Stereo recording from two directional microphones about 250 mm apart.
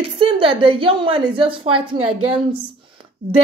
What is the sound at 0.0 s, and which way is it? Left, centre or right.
A woman's voice, right.